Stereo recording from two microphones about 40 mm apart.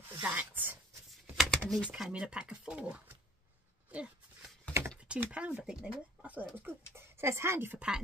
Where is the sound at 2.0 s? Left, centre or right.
Right.